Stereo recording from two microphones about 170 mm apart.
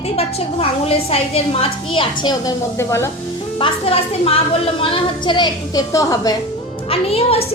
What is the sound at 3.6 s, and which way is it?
A woman's voice, 35° left (ahead or behind).